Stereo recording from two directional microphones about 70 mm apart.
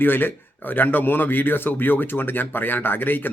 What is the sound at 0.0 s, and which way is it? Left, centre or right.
A man's voice, left.